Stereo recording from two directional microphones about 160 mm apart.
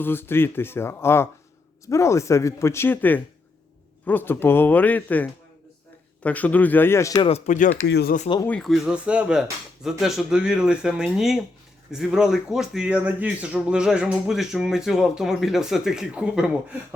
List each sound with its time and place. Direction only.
0.0 s speech: 15° left (ahead or behind)
7.3 s speech: 45° left (ahead or behind)
7.9 s speech: 90° left
8.4 s speech: 5° left (ahead or behind)